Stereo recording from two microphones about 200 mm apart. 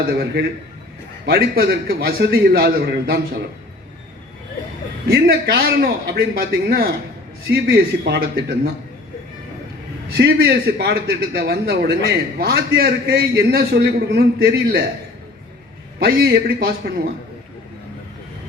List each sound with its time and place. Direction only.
1.2 s a man's voice: 50° right (ahead or behind)
5.0 s a man's voice: 50° right (ahead or behind)
10.2 s a man's voice: 50° right (ahead or behind)
16.0 s a man's voice: 50° right (ahead or behind)